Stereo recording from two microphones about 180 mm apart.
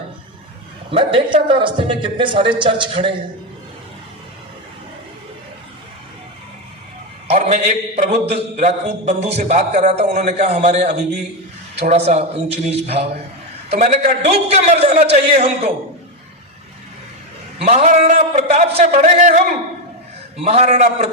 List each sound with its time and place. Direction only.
0.9 s speech: 30° right (ahead or behind)
7.3 s a man's voice: 35° right (ahead or behind)
17.7 s a man's voice: 40° right (ahead or behind)
20.4 s a man's voice: 35° right (ahead or behind)